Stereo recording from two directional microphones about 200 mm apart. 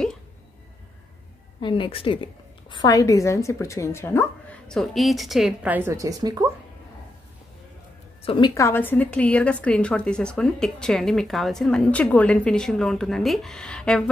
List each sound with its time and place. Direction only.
1.6 s a woman's voice: 25° left (ahead or behind); by 6.4 s 20° right (ahead or behind)
8.2 s a woman's voice: 25° left (ahead or behind); by 14.1 s 5° left (ahead or behind)